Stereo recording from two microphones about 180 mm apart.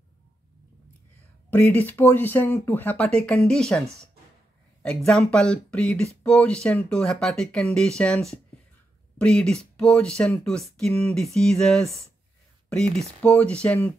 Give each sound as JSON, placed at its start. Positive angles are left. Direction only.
{"t": 1.5, "sound": "speech", "side_deg": 10}
{"t": 12.6, "sound": "a sound", "side_deg": 5}
{"t": 13.2, "sound": "speech", "side_deg": 10}